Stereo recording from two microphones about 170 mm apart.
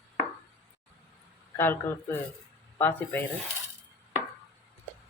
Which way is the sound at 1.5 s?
15° left (ahead or behind).